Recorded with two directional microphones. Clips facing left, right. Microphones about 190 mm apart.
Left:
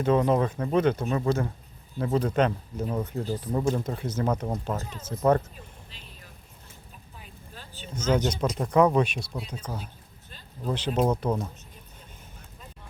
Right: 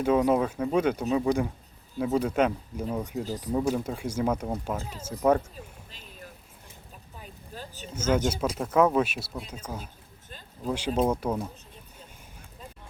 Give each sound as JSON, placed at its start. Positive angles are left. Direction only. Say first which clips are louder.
{"t": 0.0, "sound": "speech", "louder": "even", "side_deg": -10}
{"t": 5.9, "sound": "a sound", "louder": "right 4 dB", "side_deg": -45}
{"t": 7.2, "sound": "vehicle", "louder": "right 6 dB", "side_deg": -40}
{"t": 7.9, "sound": "speech", "louder": "even", "side_deg": -10}